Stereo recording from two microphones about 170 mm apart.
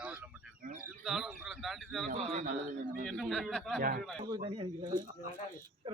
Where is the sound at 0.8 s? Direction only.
5° right (ahead or behind).